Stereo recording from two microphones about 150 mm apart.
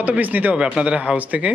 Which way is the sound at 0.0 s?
10° right (ahead or behind).